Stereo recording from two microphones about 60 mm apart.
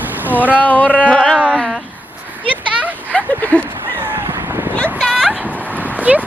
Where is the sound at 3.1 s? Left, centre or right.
Left.